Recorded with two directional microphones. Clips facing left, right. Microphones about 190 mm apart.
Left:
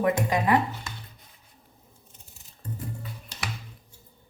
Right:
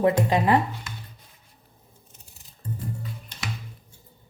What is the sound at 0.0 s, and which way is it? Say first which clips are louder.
Speech: right 3 dB; 30° right (ahead or behind).